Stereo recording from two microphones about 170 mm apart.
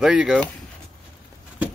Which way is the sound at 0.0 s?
5° right (ahead or behind).